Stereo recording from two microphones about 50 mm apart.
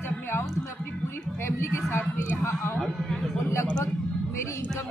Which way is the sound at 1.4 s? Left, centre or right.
Left.